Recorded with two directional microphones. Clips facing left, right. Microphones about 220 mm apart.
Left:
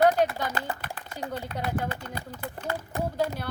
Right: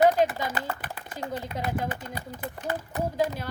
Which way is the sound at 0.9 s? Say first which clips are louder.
Right 1 dB; 20° right (ahead or behind).